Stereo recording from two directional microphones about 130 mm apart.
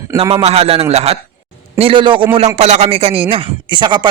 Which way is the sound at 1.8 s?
40° right (ahead or behind).